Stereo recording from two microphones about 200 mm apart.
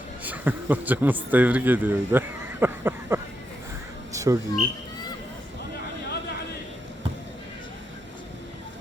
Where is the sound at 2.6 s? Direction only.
10° right (ahead or behind).